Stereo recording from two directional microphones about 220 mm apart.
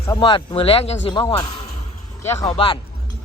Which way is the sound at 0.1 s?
20° left (ahead or behind).